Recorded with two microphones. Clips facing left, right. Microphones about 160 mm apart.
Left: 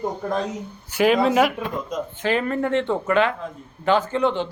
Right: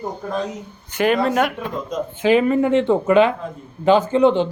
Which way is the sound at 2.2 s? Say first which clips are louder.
Right 7 dB; 10° right (ahead or behind).